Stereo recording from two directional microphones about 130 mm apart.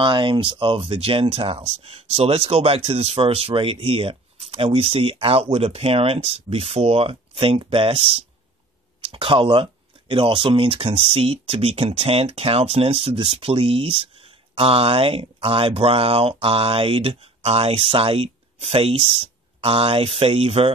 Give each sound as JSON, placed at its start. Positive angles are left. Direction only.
{"t": 0.0, "sound": "speech", "side_deg": -40}